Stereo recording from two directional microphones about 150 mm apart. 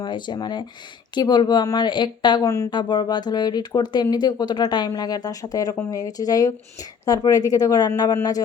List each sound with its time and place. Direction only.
0.0 s speech: 30° left (ahead or behind)